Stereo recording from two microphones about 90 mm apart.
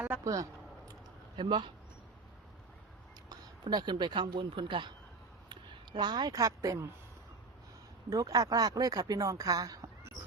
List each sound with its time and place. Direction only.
1.4 s speech: 60° right (ahead or behind)
3.6 s speech: 50° right (ahead or behind)
5.5 s speech: 55° right (ahead or behind); by 6.8 s 40° right (ahead or behind)
8.1 s speech: 40° right (ahead or behind)